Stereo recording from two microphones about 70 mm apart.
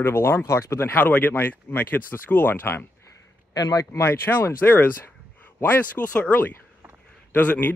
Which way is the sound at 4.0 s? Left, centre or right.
Left.